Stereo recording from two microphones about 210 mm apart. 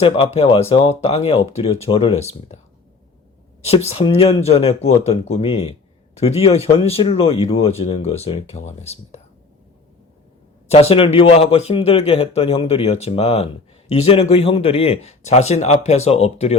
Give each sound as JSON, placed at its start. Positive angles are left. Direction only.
{"t": 0.0, "sound": "speech", "side_deg": 25}
{"t": 3.7, "sound": "speech", "side_deg": 30}
{"t": 10.7, "sound": "speech", "side_deg": 30}